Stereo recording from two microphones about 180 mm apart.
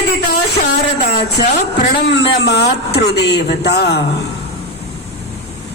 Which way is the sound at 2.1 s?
65° left (ahead or behind).